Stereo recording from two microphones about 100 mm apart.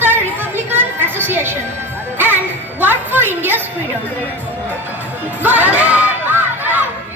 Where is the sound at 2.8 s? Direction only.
20° right (ahead or behind).